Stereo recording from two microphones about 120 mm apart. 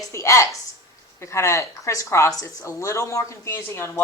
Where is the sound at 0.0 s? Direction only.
25° left (ahead or behind).